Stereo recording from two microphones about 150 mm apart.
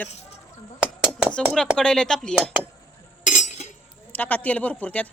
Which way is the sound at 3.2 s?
55° left (ahead or behind).